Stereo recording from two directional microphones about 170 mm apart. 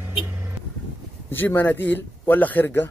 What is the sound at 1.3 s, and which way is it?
Speech, 10° left (ahead or behind).